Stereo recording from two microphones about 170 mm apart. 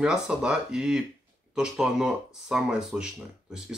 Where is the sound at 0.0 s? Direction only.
5° right (ahead or behind).